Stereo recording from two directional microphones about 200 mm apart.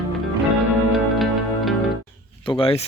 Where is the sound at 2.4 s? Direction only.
25° left (ahead or behind).